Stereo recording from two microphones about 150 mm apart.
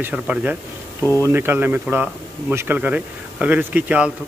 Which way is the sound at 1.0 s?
15° left (ahead or behind).